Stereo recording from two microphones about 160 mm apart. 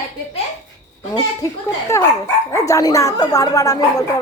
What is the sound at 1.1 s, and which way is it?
A woman's voice, 20° left (ahead or behind).